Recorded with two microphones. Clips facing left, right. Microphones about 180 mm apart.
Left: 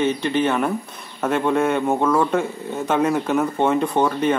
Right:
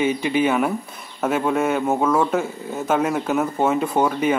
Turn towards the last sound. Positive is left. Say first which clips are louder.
# even
turn(degrees=-5)  # may be behind; listen again after turning